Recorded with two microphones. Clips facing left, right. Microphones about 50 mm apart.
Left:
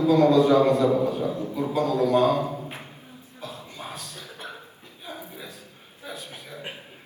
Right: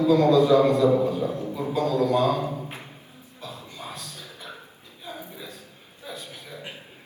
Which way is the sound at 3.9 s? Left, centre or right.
Left.